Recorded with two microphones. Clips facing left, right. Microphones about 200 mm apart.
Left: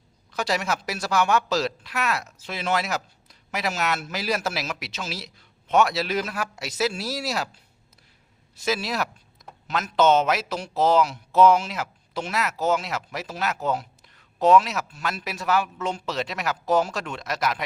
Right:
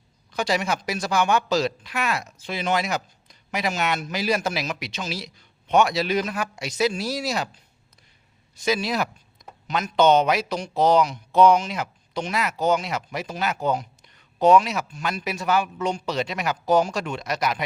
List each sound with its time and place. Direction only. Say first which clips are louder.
0.3 s speech: right 2 dB; centre (ahead or behind)
8.6 s speech: right 2 dB; centre (ahead or behind)